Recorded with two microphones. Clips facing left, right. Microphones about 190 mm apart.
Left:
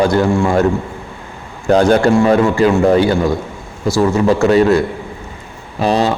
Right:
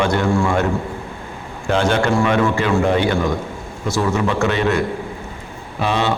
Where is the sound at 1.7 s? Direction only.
40° left (ahead or behind).